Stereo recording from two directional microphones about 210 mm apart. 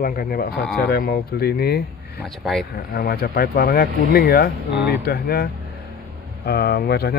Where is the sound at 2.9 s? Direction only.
45° left (ahead or behind).